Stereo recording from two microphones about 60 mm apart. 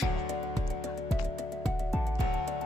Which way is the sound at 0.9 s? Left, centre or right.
Centre.